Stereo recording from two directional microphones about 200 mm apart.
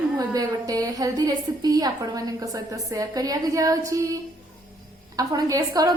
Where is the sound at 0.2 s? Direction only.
20° right (ahead or behind).